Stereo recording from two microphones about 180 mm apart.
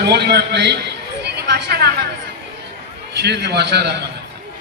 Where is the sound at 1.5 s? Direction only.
65° right (ahead or behind).